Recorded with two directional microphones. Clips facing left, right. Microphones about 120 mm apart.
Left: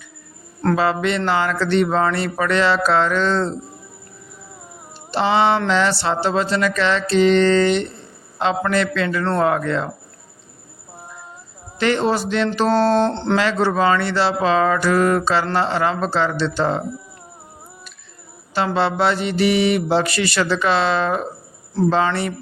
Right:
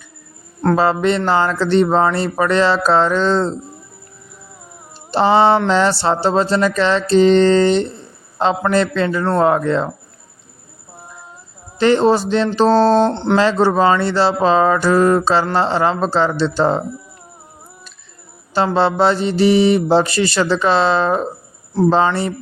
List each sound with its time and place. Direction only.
0.8 s mantra: 35° right (ahead or behind)
5.1 s mantra: 35° right (ahead or behind)
9.4 s speech: 30° right (ahead or behind)
11.8 s mantra: 35° right (ahead or behind)
12.7 s mantra: 15° right (ahead or behind)
13.3 s mantra: 30° right (ahead or behind)
18.5 s mantra: 35° right (ahead or behind)